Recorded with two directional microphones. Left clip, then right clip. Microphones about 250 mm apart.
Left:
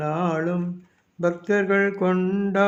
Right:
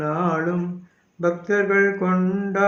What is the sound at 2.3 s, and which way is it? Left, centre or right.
Mantra, left.